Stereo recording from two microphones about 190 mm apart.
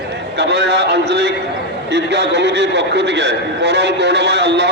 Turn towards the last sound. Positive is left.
turn(degrees=-60)  # may be behind; listen again after turning